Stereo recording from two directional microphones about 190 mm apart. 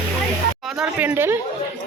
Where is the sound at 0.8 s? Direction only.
10° right (ahead or behind).